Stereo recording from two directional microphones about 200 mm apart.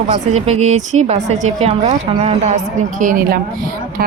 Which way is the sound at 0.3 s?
35° right (ahead or behind).